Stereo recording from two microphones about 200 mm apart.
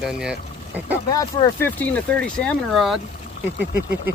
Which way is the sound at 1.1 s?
20° left (ahead or behind).